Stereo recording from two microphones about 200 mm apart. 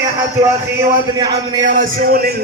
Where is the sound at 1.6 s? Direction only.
40° right (ahead or behind).